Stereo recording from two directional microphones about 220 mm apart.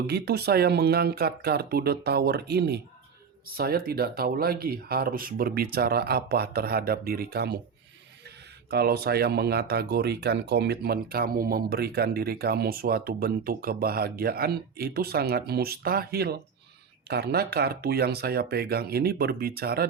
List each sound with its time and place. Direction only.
0.1 s speech: 45° right (ahead or behind)
8.7 s speech: 45° right (ahead or behind)